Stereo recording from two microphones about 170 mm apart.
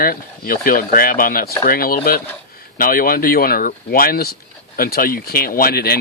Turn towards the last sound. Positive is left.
turn(degrees=65)  # may be behind; listen again after turning